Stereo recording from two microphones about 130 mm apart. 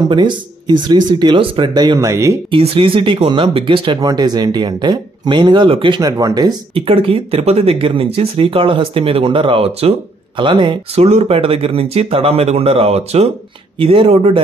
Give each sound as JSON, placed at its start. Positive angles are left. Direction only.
{"t": 0.1, "sound": "speech", "side_deg": -35}
{"t": 2.5, "sound": "speech", "side_deg": -45}
{"t": 4.0, "sound": "speech", "side_deg": -30}
{"t": 6.9, "sound": "speech", "side_deg": -45}
{"t": 10.3, "sound": "speech", "side_deg": -35}
{"t": 11.0, "sound": "speech", "side_deg": -55}